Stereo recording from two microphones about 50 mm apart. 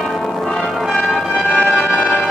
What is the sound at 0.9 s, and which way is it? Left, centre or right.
Music, centre.